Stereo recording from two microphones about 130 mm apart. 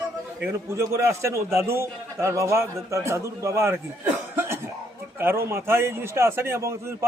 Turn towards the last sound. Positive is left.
turn(degrees=-20)  # may be behind; listen again after turning